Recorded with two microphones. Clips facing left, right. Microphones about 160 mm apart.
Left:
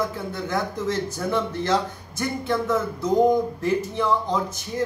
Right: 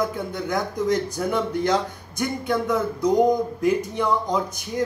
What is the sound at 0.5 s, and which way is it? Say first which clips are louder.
Speech: right 3 dB; 15° right (ahead or behind).